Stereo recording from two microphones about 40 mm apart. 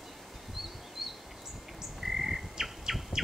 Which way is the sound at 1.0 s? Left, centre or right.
Centre.